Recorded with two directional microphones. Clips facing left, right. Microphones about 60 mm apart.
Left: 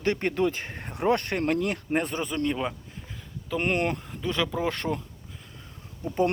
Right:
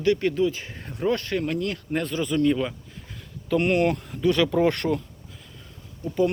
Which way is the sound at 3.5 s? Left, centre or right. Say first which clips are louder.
Right 5 dB; centre.